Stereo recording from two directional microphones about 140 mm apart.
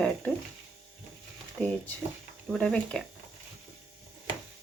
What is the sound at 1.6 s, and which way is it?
Speech, 10° left (ahead or behind).